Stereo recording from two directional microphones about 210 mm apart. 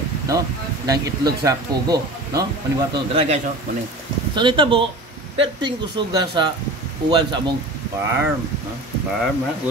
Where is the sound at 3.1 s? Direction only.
30° right (ahead or behind).